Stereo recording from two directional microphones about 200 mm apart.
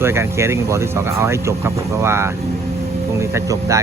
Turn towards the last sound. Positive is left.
turn(degrees=-15)  # may be behind; listen again after turning